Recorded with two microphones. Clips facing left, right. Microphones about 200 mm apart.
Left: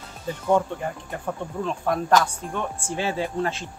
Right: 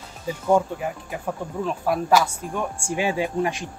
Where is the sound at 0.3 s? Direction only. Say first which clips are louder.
Right 2 dB; 10° right (ahead or behind).